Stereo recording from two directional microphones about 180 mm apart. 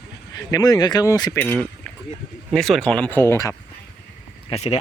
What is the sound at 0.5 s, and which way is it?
Speech, 20° left (ahead or behind).